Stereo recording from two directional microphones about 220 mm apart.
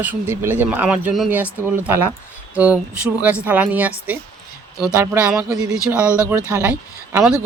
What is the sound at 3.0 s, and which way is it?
Speech, 5° right (ahead or behind).